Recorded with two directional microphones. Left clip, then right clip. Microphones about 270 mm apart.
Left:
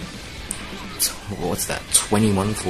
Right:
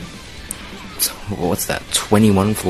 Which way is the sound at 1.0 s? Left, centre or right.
Right.